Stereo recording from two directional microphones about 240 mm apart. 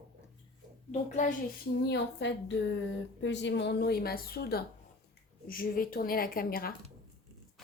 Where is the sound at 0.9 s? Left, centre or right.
Left.